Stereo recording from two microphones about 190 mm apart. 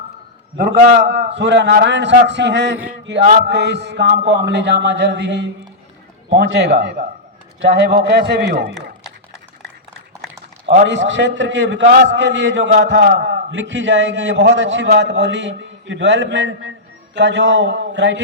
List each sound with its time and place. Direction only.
0.5 s a man's voice: 55° right (ahead or behind)
2.7 s male singing: 5° right (ahead or behind)
3.1 s a man's voice: 65° right (ahead or behind)
10.8 s a man's voice: 70° right (ahead or behind)
17.2 s a man's voice: 70° right (ahead or behind)